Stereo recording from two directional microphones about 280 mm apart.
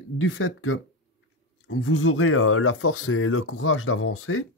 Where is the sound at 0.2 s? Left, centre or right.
Left.